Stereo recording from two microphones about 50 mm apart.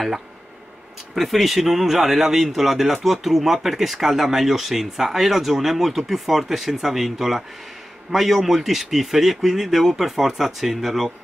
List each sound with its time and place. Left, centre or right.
1.1 s a man's voice: centre